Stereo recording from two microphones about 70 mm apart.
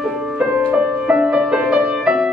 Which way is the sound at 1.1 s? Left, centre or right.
Centre.